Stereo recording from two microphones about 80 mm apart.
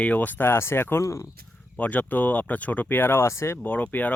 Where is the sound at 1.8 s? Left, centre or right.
Centre; by 3.6 s left.